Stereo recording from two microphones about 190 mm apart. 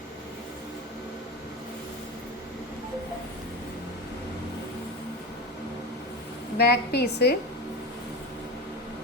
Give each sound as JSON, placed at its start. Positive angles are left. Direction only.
{"t": 6.6, "sound": "a woman's voice", "side_deg": 60}